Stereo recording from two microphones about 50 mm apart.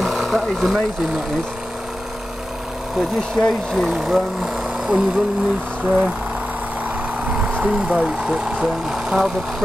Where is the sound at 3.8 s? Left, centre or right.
Centre.